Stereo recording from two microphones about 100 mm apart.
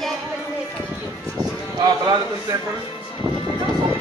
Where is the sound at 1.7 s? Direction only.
45° right (ahead or behind).